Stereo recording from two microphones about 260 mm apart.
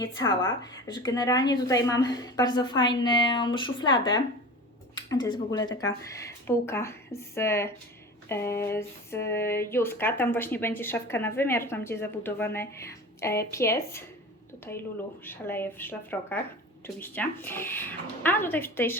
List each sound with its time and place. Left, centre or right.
0.0 s speech: centre